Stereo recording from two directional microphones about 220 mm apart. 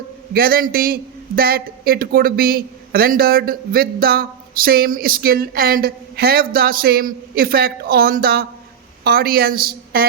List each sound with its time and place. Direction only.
0.3 s a man's voice: 40° right (ahead or behind)